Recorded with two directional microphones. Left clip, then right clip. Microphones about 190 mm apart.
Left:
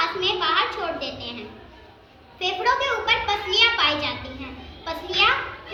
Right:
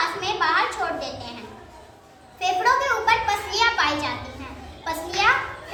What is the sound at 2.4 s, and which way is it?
Children playing, 30° right (ahead or behind).